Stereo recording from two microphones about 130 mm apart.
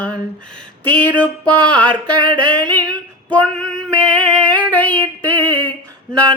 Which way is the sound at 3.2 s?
5° left (ahead or behind).